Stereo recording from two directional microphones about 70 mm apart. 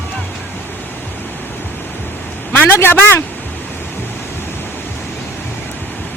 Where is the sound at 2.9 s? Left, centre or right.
Left.